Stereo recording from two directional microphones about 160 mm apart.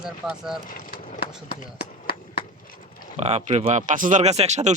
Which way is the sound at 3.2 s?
40° right (ahead or behind).